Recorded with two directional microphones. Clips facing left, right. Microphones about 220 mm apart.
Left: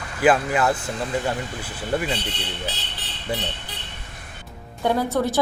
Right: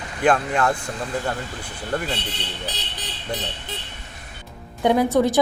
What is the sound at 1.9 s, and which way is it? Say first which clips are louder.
Speech: left 2 dB; 5° left (ahead or behind).